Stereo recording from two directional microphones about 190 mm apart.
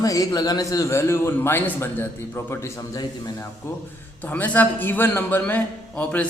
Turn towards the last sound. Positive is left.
turn(degrees=5)  # may be behind; listen again after turning